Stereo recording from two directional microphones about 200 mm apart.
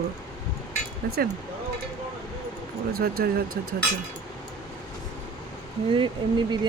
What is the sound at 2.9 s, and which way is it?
Speech, 50° right (ahead or behind).